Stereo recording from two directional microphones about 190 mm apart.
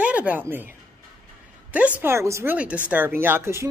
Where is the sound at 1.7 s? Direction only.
10° right (ahead or behind).